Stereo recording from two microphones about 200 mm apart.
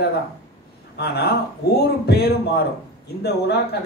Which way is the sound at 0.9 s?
55° left (ahead or behind).